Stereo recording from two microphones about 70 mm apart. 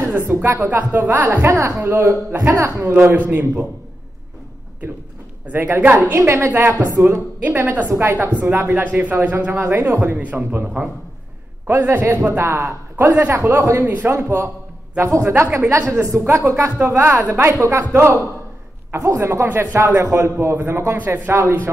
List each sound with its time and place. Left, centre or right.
0.3 s a woman's voice: right
1.9 s a man's voice: right
5.5 s a woman's voice: right
6.1 s a man's voice: right
13.5 s a man's voice: right
13.8 s a man's voice: right
16.8 s a man's voice: right
17.6 s a man's voice: right
20.3 s a man's voice: right